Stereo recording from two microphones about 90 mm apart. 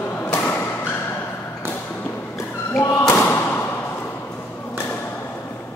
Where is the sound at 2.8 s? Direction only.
30° left (ahead or behind).